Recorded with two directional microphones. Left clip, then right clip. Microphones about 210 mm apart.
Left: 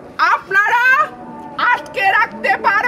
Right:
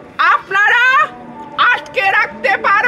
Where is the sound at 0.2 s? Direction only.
10° left (ahead or behind).